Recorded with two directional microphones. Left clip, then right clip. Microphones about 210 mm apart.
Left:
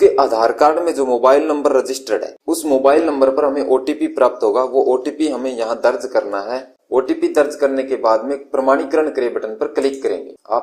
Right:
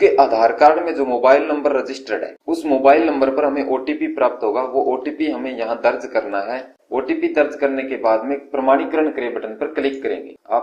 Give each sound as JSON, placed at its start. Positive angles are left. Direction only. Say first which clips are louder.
{"t": 0.0, "sound": "a man's voice", "louder": "even", "side_deg": 50}